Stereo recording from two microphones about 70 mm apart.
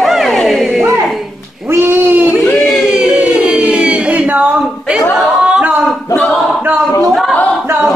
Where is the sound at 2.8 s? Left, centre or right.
Centre.